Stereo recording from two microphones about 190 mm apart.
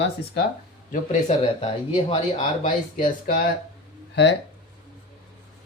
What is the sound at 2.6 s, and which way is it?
Speech, 45° left (ahead or behind).